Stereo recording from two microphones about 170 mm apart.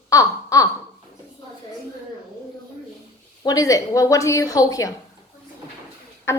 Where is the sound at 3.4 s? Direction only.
20° left (ahead or behind).